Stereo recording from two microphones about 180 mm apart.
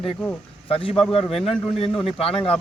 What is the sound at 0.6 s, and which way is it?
Speech, 30° left (ahead or behind).